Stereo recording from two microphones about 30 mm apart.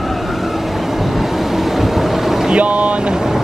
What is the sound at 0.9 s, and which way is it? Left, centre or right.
Boat, centre.